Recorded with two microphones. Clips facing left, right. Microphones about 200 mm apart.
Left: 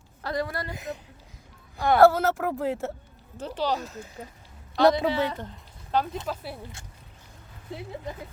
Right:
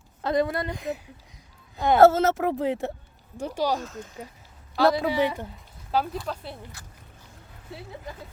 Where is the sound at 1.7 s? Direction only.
20° right (ahead or behind).